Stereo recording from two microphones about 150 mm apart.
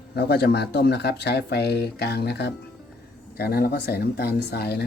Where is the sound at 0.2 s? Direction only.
90° left.